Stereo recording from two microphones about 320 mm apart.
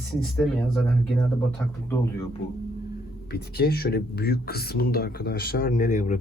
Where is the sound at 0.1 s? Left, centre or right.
Centre.